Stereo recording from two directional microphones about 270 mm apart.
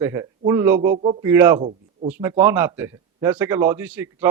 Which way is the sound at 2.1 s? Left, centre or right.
Centre.